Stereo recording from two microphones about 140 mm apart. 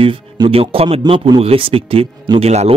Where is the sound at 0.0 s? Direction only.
40° right (ahead or behind).